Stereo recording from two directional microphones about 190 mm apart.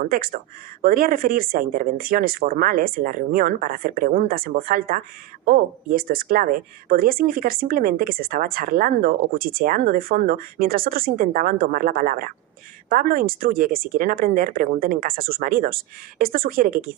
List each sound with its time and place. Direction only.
0.0 s speech: 50° right (ahead or behind)